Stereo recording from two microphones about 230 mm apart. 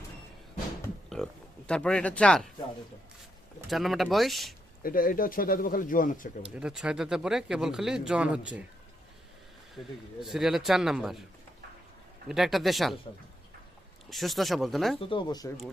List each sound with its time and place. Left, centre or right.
1.1 s speech: centre
3.7 s speech: centre
4.8 s speech: left
6.6 s speech: centre
9.7 s speech: centre
12.3 s speech: centre
14.1 s speech: centre
14.9 s speech: centre